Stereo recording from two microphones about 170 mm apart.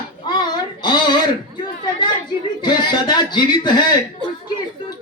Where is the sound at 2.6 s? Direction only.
25° left (ahead or behind).